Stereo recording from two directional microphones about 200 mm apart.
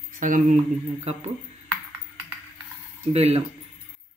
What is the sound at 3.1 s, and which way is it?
Speech, 30° right (ahead or behind).